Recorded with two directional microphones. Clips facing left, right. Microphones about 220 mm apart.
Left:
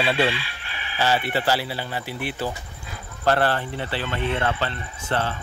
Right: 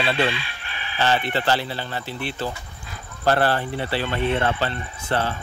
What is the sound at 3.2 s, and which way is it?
Speech, 35° right (ahead or behind).